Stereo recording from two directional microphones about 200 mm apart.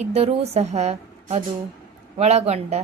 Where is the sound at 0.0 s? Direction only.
30° right (ahead or behind).